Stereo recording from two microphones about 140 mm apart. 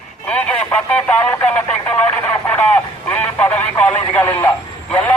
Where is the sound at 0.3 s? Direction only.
10° left (ahead or behind).